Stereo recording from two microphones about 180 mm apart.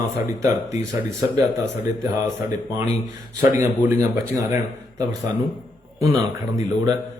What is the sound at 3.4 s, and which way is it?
A man's voice, 15° right (ahead or behind).